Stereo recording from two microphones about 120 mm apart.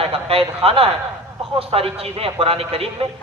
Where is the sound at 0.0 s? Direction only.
55° right (ahead or behind).